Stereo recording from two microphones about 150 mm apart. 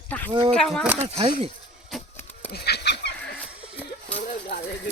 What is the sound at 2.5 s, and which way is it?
Fowl, 90° left.